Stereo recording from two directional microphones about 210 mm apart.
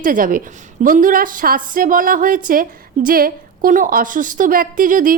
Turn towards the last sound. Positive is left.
turn(degrees=-40)  # may be behind; listen again after turning